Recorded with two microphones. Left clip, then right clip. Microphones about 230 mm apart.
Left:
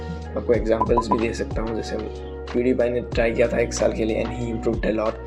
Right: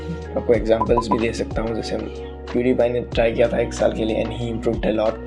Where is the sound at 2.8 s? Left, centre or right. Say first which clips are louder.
Right 3 dB; right.